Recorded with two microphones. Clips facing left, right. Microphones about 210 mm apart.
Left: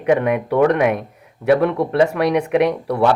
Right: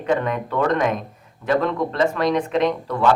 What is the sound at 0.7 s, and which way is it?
Speech, 65° left (ahead or behind).